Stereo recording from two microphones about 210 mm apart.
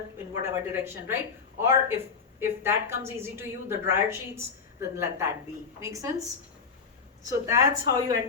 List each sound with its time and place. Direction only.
0.4 s a woman's voice: 10° right (ahead or behind)
7.3 s a woman's voice: 15° right (ahead or behind)